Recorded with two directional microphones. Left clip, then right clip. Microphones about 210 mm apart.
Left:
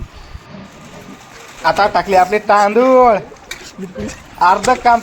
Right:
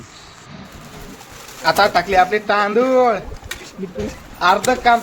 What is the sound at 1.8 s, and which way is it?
Speech, 5° left (ahead or behind).